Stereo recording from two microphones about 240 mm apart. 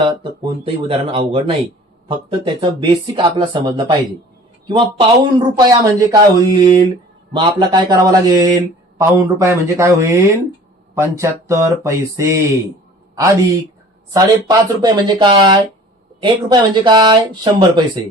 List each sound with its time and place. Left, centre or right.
0.0 s speech: centre
14.1 s speech: centre